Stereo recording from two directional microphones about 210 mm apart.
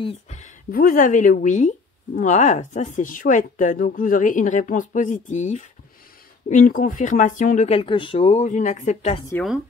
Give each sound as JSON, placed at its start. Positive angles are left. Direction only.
{"t": 0.0, "sound": "speech", "side_deg": 35}